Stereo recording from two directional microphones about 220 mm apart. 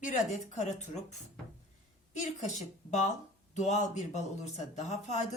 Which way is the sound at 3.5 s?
30° left (ahead or behind).